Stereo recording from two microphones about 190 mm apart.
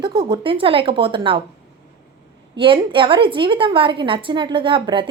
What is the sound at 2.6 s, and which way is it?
A woman's voice, 25° right (ahead or behind).